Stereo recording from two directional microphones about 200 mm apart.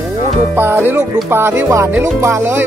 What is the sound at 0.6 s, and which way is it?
Speech, 10° right (ahead or behind).